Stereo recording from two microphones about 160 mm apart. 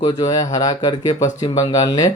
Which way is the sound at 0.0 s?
25° left (ahead or behind).